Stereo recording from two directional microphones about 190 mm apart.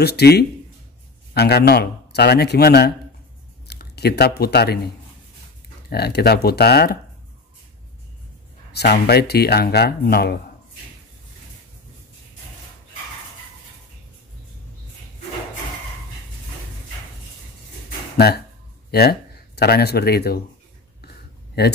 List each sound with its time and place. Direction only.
0.0 s speech: 60° left (ahead or behind)
5.9 s speech: 55° left (ahead or behind)
8.7 s speech: 60° left (ahead or behind)
18.1 s speech: 60° left (ahead or behind)
21.6 s speech: 60° left (ahead or behind)